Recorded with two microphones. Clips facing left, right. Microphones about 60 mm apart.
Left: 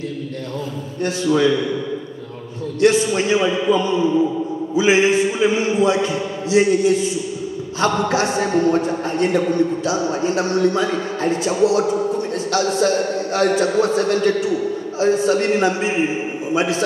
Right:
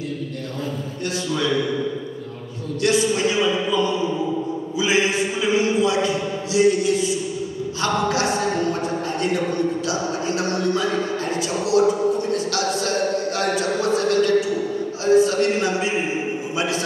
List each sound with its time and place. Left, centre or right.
1.0 s a man's voice: left
2.8 s a sound: left
4.7 s a man's voice: left